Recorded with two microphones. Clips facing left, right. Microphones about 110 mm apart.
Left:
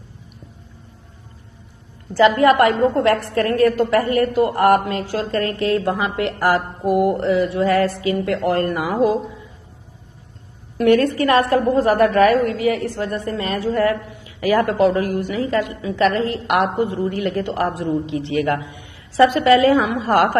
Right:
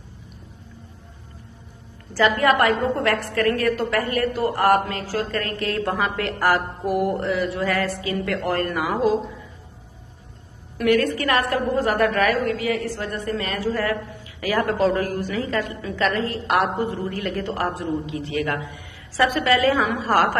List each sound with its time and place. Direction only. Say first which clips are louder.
2.1 s a woman's voice: left 5 dB; 20° left (ahead or behind)
10.8 s a woman's voice: left 5 dB; 30° left (ahead or behind)